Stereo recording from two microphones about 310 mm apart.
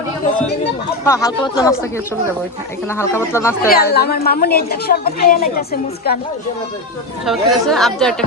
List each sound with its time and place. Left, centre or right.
1.0 s speech: centre
2.9 s speech: centre
3.7 s a woman's voice: left
7.3 s speech: centre